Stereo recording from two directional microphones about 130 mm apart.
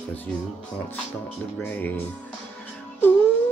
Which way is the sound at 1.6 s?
15° left (ahead or behind).